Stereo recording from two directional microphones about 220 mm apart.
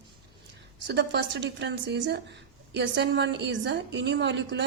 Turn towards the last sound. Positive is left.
turn(degrees=-55)  # may be behind; listen again after turning